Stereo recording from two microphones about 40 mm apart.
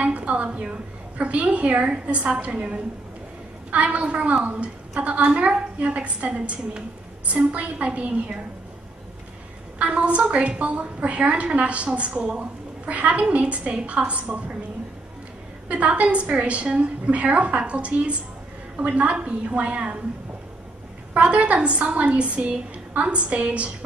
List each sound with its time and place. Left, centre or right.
0.0 s a woman's voice: right
9.8 s a woman's voice: right
15.7 s a woman's voice: right
21.2 s a woman's voice: right